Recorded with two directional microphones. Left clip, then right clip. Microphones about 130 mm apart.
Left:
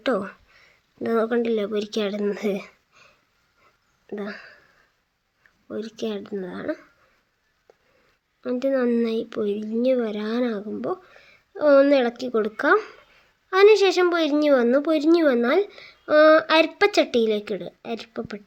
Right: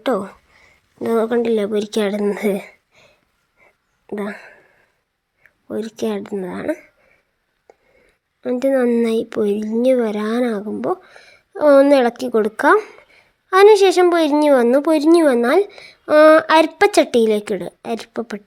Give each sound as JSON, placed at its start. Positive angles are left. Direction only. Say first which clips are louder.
{"t": 0.5, "sound": "speech", "louder": "right 4 dB", "side_deg": -20}
{"t": 4.1, "sound": "speech", "louder": "right 6 dB", "side_deg": -35}
{"t": 4.4, "sound": "a sound", "louder": "right 4 dB", "side_deg": -25}
{"t": 5.7, "sound": "speech", "louder": "right 7 dB", "side_deg": -40}
{"t": 7.7, "sound": "a sound", "louder": "right 7 dB", "side_deg": -30}
{"t": 8.4, "sound": "a woman's voice", "louder": "right 6 dB", "side_deg": -40}